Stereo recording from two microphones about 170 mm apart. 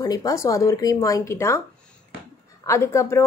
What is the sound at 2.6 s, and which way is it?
Speech, 15° left (ahead or behind).